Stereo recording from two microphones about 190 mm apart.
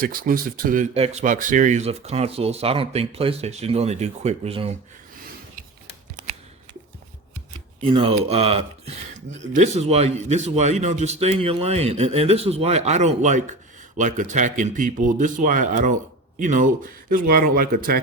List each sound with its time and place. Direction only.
0.0 s speech: 50° right (ahead or behind); by 4.8 s 30° right (ahead or behind)
7.8 s speech: 30° right (ahead or behind); by 18.0 s 50° right (ahead or behind)